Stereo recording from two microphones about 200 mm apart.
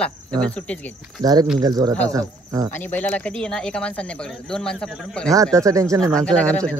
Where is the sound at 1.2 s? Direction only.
20° right (ahead or behind).